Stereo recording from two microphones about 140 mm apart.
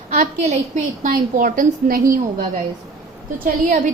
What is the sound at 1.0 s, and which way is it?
A woman's voice, 75° right (ahead or behind).